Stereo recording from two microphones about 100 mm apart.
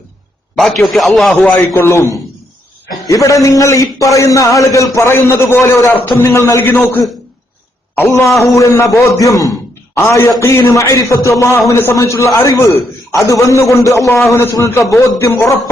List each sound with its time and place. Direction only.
0.5 s a man's voice: centre (ahead or behind)
1.5 s a man's voice: 20° left (ahead or behind)
8.4 s a man's voice: 30° left (ahead or behind)
9.9 s a man's voice: 25° left (ahead or behind)